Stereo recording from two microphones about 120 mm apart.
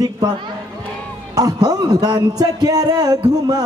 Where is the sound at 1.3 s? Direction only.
30° right (ahead or behind).